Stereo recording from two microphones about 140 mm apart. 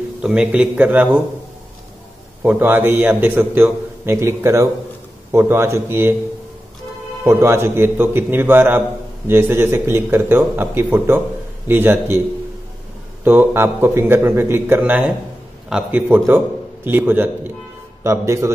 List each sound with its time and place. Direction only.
0.2 s a man's voice: 5° right (ahead or behind)
2.4 s a man's voice: 15° right (ahead or behind)
7.2 s a man's voice: 20° right (ahead or behind)
13.2 s a man's voice: 15° right (ahead or behind)